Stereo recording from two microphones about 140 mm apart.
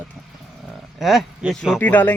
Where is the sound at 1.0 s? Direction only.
5° right (ahead or behind).